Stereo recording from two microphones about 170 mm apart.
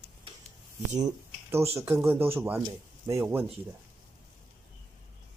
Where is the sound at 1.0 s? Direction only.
15° right (ahead or behind).